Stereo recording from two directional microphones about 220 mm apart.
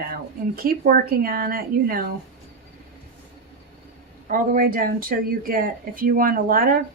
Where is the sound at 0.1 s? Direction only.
40° right (ahead or behind).